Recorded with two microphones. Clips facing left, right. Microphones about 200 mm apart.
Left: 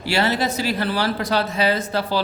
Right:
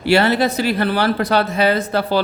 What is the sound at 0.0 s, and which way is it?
Speech, 60° right (ahead or behind).